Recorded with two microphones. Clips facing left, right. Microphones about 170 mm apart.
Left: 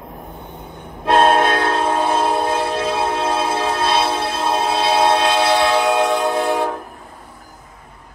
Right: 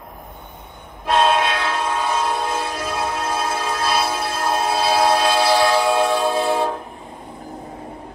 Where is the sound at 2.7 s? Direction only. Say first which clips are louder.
Left 5 dB; 25° left (ahead or behind).